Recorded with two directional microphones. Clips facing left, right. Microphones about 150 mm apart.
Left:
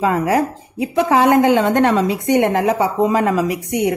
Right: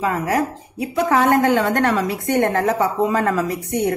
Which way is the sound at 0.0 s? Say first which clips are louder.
Left 4 dB; 25° left (ahead or behind).